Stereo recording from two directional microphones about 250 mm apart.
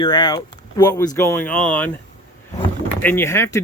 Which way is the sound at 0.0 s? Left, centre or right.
Left.